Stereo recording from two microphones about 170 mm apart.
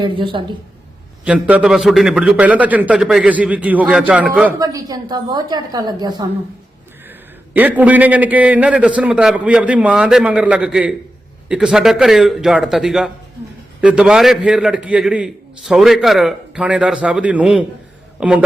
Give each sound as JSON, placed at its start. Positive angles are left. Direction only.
{"t": 0.0, "sound": "a woman's voice", "side_deg": -30}
{"t": 1.2, "sound": "a man's voice", "side_deg": -10}
{"t": 4.6, "sound": "a woman's voice", "side_deg": -20}
{"t": 7.5, "sound": "a man's voice", "side_deg": -10}